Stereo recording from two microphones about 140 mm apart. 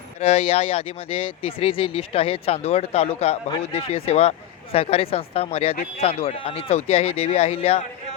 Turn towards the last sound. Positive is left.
turn(degrees=45)  # may be behind; listen again after turning